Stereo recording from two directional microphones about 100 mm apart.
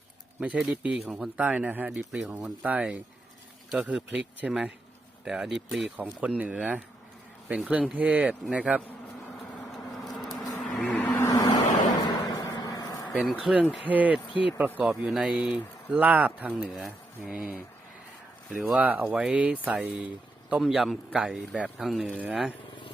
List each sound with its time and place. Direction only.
0.3 s speech: 15° right (ahead or behind)
1.9 s a man's voice: 5° right (ahead or behind)
9.7 s a sound: centre (ahead or behind)
10.6 s vehicle: 5° left (ahead or behind)
11.2 s vehicle: 35° left (ahead or behind)
12.1 s a sound: 35° left (ahead or behind)
12.5 s vehicle: 35° left (ahead or behind)
13.1 s a man's voice: 5° right (ahead or behind)